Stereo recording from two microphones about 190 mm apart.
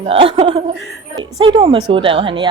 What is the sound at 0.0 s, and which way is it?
Speech, 30° right (ahead or behind).